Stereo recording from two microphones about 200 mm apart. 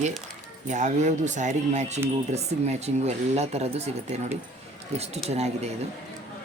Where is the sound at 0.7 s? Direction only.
35° right (ahead or behind).